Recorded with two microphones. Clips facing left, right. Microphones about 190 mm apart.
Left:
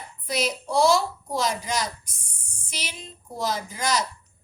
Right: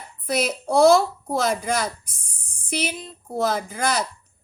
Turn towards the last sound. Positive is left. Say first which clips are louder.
# right 2 dB
turn(degrees=-55)  # may be behind; listen again after turning